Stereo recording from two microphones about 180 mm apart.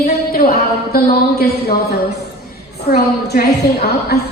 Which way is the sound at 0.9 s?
60° left (ahead or behind).